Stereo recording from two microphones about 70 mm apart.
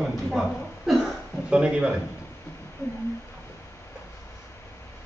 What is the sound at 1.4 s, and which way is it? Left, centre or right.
Speech, centre.